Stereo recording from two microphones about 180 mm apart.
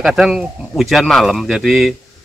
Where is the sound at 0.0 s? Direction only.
Centre (ahead or behind).